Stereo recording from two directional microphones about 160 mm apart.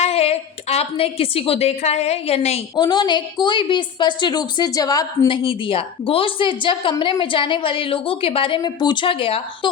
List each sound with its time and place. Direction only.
0.0 s a woman's voice: 40° left (ahead or behind)
2.7 s a woman's voice: 30° left (ahead or behind)
5.4 s a woman's voice: 35° left (ahead or behind)